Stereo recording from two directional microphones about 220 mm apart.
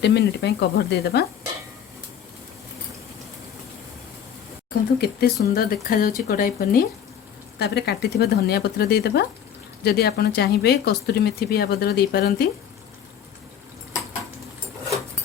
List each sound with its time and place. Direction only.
0.0 s speech: 50° left (ahead or behind)
4.9 s speech: 45° left (ahead or behind)